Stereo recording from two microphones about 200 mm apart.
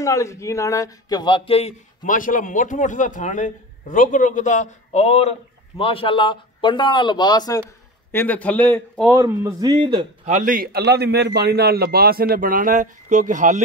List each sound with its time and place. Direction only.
0.0 s a man's voice: 15° left (ahead or behind)
9.1 s a man's voice: 15° right (ahead or behind); by 13.6 s 40° right (ahead or behind)